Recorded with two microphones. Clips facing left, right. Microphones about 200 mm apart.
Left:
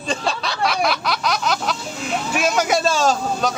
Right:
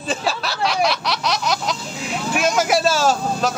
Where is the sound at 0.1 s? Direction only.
5° right (ahead or behind).